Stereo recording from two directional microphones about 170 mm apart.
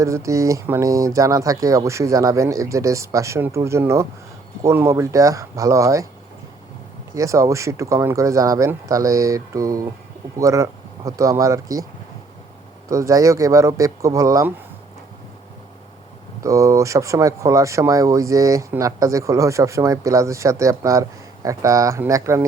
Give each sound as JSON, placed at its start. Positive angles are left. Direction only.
{"t": 0.0, "sound": "speech", "side_deg": -20}
{"t": 7.1, "sound": "speech", "side_deg": -20}
{"t": 12.9, "sound": "speech", "side_deg": -20}
{"t": 16.4, "sound": "speech", "side_deg": -20}